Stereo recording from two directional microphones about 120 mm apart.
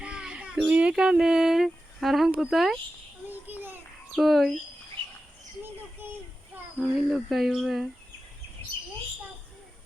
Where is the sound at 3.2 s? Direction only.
15° right (ahead or behind).